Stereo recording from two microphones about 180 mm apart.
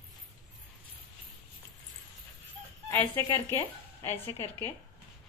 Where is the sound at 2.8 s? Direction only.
20° left (ahead or behind).